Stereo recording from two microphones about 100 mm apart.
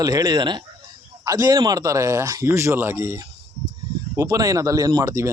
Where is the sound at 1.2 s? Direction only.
35° right (ahead or behind).